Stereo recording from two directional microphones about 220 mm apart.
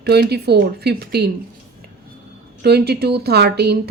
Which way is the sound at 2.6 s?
45° right (ahead or behind).